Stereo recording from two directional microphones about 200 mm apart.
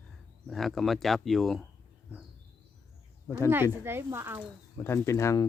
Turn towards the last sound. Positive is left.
turn(degrees=15)  # may be behind; listen again after turning